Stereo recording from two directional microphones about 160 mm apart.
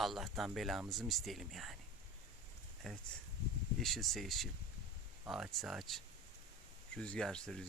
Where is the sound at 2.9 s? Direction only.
5° left (ahead or behind).